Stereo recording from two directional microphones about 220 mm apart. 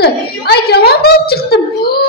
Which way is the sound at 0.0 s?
45° left (ahead or behind).